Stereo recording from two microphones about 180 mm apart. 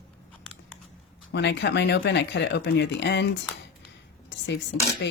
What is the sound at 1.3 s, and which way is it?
Speech, 75° left (ahead or behind).